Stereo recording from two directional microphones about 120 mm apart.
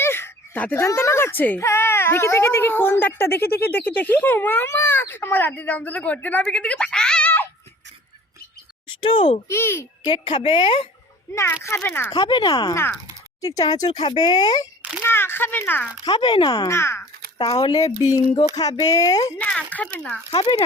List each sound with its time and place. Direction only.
0.0 s speech: 20° left (ahead or behind)
9.0 s a child's voice: 50° left (ahead or behind)
9.5 s speech: 20° left (ahead or behind)
10.1 s a woman's voice: 50° left (ahead or behind)
11.3 s speech: 20° left (ahead or behind)
12.1 s speech: 40° left (ahead or behind)
15.0 s speech: 20° left (ahead or behind)
16.0 s speech: 40° left (ahead or behind)
16.6 s speech: 20° left (ahead or behind)
17.3 s speech: 40° left (ahead or behind)
19.4 s speech: 10° left (ahead or behind)
20.3 s a woman's voice: 45° left (ahead or behind)